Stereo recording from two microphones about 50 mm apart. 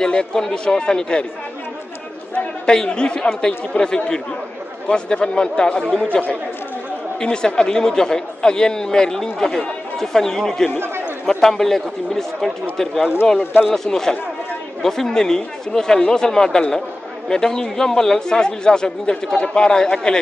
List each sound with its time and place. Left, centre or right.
0.0 s a man's voice: centre
2.3 s a man's voice: centre
7.2 s a man's voice: centre
13.4 s speech: left
13.8 s a man's voice: centre